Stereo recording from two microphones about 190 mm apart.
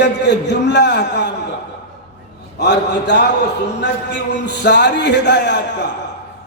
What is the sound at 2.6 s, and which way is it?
A man's voice, 65° left (ahead or behind).